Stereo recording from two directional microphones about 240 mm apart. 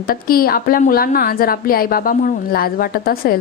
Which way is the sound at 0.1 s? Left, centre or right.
Left.